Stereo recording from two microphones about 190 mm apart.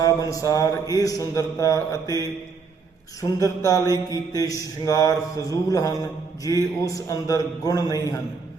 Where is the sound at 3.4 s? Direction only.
20° left (ahead or behind).